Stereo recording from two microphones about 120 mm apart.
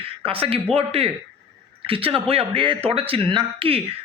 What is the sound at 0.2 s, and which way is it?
A man's voice, 50° right (ahead or behind).